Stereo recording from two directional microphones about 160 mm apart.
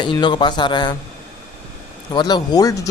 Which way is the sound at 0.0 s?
30° left (ahead or behind).